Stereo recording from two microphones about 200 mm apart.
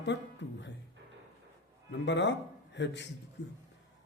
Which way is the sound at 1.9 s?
60° left (ahead or behind).